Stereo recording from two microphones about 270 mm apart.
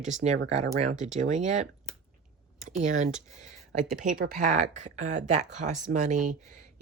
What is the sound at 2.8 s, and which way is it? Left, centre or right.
Speech, right.